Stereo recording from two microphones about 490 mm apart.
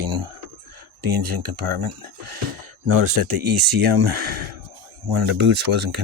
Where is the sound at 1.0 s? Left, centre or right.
Right.